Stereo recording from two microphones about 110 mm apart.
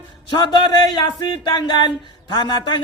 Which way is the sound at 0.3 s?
45° left (ahead or behind).